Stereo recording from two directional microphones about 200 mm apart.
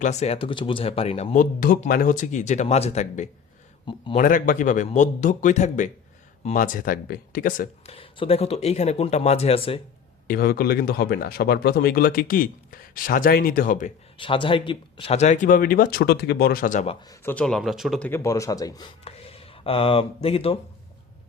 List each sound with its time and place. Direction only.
0.0 s a man's voice: 35° left (ahead or behind)
4.2 s speech: 45° left (ahead or behind)
7.9 s speech: 25° left (ahead or behind)
10.2 s speech: 50° left (ahead or behind)
14.2 s speech: 25° left (ahead or behind)
17.1 s speech: 10° left (ahead or behind)
18.1 s speech: 15° left (ahead or behind)
19.0 s speech: 30° left (ahead or behind)